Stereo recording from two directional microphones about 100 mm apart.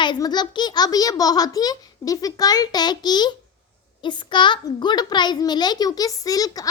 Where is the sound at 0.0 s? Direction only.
45° left (ahead or behind).